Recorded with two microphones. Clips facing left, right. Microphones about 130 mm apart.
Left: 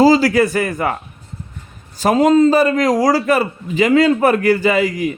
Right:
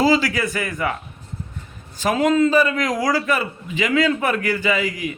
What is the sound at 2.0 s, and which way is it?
A man's voice, 40° left (ahead or behind).